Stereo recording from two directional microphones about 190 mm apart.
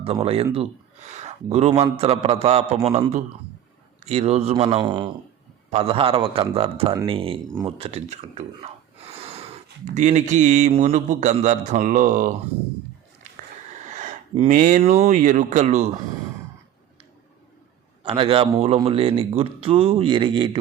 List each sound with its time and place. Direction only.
0.0 s a man's voice: 30° right (ahead or behind)
4.0 s a man's voice: 35° right (ahead or behind)
13.8 s speech: 40° right (ahead or behind)
18.0 s speech: 30° right (ahead or behind)